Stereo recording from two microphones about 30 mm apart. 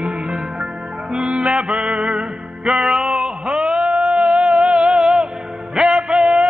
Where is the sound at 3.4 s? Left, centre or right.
Right.